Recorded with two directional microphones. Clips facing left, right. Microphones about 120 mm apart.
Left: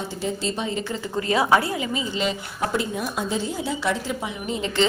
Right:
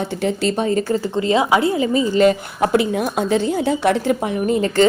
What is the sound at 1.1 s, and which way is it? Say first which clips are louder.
A woman's voice: right 2 dB; 25° right (ahead or behind).